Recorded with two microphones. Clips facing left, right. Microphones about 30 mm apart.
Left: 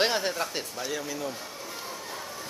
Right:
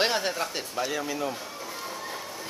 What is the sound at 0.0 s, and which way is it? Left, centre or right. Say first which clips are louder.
Speech: even; centre.